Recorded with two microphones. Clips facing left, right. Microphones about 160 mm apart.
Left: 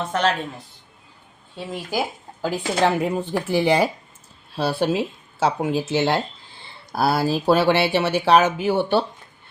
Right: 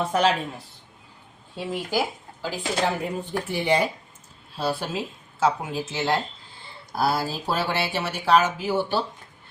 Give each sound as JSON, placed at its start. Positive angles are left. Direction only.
{"t": 0.0, "sound": "speech", "side_deg": -10}
{"t": 2.4, "sound": "speech", "side_deg": 75}
{"t": 4.5, "sound": "speech", "side_deg": 70}
{"t": 6.9, "sound": "speech", "side_deg": 70}